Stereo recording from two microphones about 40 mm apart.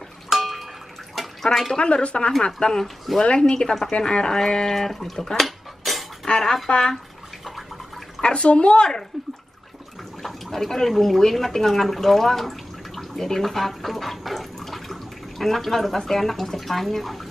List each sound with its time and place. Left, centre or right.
0.3 s a sound: centre
1.4 s speech: centre
1.7 s speech: left; by 5.1 s centre
5.1 s speech: centre
5.4 s cutlery: centre
6.2 s speech: centre
8.2 s speech: left
10.2 s speech: centre